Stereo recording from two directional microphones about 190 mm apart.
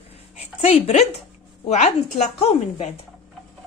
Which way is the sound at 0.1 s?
30° left (ahead or behind).